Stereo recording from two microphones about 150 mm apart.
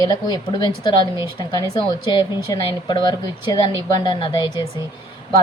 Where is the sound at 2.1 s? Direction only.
30° left (ahead or behind).